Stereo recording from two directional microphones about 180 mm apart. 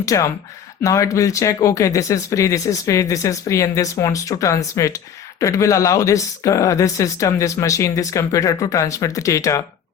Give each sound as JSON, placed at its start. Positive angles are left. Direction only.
{"t": 0.0, "sound": "speech", "side_deg": 20}